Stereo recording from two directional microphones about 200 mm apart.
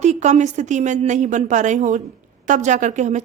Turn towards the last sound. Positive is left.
turn(degrees=-35)  # may be behind; listen again after turning